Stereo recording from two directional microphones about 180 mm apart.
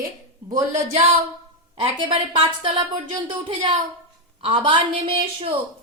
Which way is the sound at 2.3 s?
25° right (ahead or behind).